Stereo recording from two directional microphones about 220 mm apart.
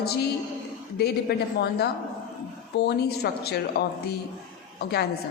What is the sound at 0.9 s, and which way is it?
A woman's voice, 45° left (ahead or behind).